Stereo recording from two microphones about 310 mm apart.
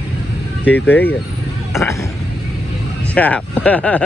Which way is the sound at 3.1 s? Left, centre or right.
Centre.